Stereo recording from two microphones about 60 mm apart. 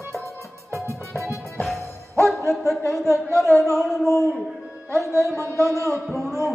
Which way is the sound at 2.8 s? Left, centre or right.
Right.